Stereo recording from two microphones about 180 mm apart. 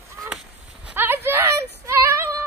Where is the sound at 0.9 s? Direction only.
10° right (ahead or behind).